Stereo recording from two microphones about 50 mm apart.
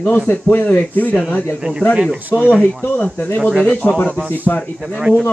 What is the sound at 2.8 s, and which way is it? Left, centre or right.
Speech, left.